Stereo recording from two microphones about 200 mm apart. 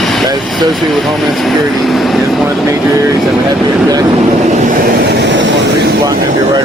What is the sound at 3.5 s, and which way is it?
Speech, 20° right (ahead or behind).